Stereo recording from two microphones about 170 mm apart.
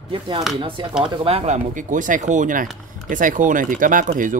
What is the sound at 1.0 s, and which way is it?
Speech, 35° right (ahead or behind).